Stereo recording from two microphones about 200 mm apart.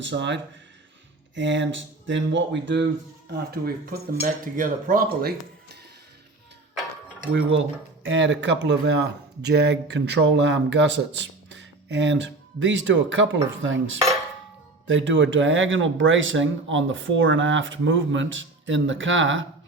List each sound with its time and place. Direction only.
0.0 s speech: 65° right (ahead or behind)
1.4 s speech: 65° right (ahead or behind)
3.2 s speech: 50° right (ahead or behind)
8.0 s speech: 70° right (ahead or behind)